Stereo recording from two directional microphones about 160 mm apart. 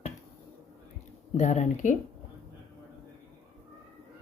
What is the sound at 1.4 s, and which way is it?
Speech, 50° left (ahead or behind).